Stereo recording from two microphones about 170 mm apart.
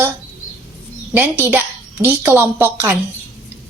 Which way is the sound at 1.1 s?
10° right (ahead or behind).